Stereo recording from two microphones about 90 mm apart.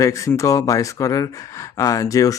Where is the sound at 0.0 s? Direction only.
35° left (ahead or behind).